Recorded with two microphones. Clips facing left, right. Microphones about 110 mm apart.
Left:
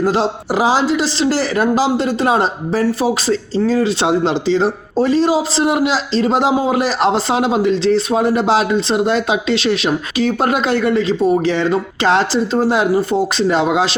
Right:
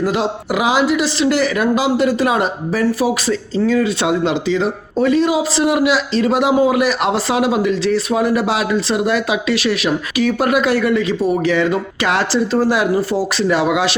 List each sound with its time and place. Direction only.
0.0 s speech: 30° left (ahead or behind)